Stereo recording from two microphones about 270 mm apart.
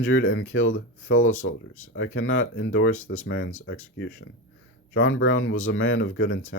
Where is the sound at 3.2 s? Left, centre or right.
Left.